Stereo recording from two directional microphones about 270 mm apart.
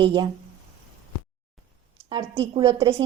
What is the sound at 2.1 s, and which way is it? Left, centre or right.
Speech, centre.